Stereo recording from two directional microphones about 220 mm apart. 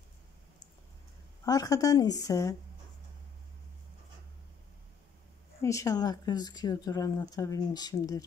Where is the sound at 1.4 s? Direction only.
15° left (ahead or behind).